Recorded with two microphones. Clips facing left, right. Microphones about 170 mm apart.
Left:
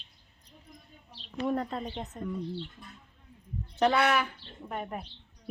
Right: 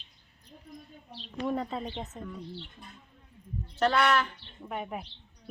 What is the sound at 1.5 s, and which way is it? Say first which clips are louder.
Speech: left 1 dB; centre (ahead or behind).